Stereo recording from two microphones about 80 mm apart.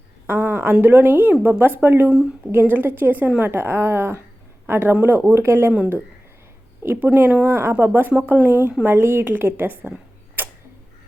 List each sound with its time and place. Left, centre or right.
0.3 s a woman's voice: right
5.7 s a woman's voice: centre
10.4 s tick-tock: right